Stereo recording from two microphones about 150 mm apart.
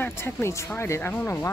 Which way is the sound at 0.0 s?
15° left (ahead or behind).